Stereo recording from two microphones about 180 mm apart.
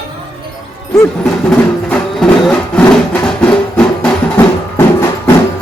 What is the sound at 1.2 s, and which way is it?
Music, 5° left (ahead or behind).